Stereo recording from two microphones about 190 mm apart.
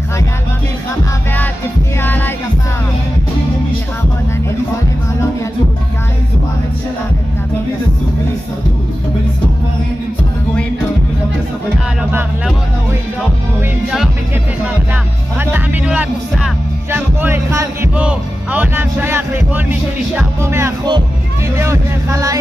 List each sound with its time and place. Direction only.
2.0 s music: 10° left (ahead or behind)
13.6 s music: centre (ahead or behind)
15.3 s speech: 10° right (ahead or behind)